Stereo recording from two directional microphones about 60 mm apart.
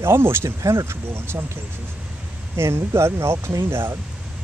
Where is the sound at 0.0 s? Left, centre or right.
Right.